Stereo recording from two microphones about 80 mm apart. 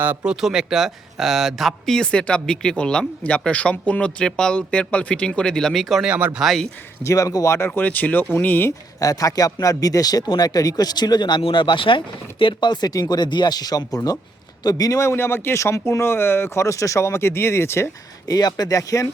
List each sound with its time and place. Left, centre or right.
0.3 s speech: centre
6.0 s speech: centre
6.4 s speech: centre
7.0 s speech: left
7.7 s speech: centre
9.0 s a man's voice: left
14.9 s speech: left
18.3 s speech: left